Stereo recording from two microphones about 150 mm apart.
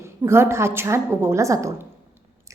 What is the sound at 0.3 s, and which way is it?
A woman's voice, 15° right (ahead or behind).